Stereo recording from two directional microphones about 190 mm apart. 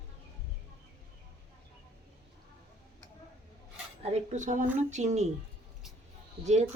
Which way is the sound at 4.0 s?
35° right (ahead or behind).